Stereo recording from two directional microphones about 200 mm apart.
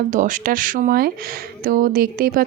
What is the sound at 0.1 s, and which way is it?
A woman's voice, 40° right (ahead or behind).